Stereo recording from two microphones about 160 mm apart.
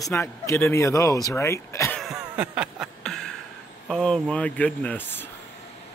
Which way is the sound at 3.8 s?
5° left (ahead or behind).